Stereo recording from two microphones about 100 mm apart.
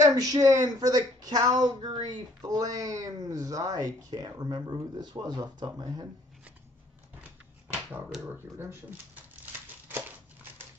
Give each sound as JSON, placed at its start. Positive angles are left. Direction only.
{"t": 0.1, "sound": "speech", "side_deg": -40}
{"t": 7.6, "sound": "dog", "side_deg": -10}
{"t": 8.5, "sound": "speech", "side_deg": -20}